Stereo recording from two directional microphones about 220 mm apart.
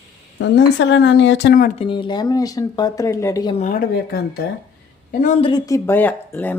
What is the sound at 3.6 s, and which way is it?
A woman's voice, 40° left (ahead or behind).